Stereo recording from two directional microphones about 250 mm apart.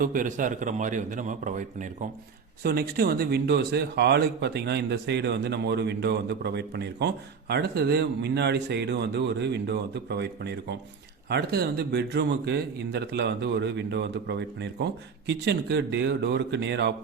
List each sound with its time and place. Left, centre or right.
0.0 s a man's voice: right